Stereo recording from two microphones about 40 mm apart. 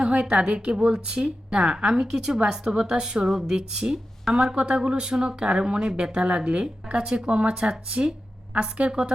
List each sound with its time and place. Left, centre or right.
0.0 s a woman's voice: right